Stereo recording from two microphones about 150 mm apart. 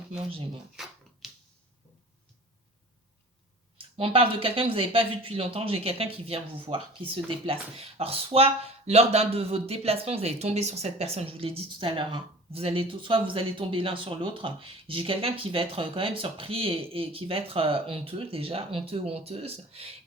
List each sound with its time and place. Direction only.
1.2 s finger snapping: centre (ahead or behind)
3.8 s speech: 40° right (ahead or behind)